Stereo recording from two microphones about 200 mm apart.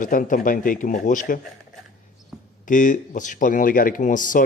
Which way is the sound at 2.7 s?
40° left (ahead or behind).